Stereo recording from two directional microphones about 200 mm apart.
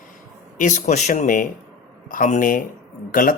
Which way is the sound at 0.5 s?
40° left (ahead or behind).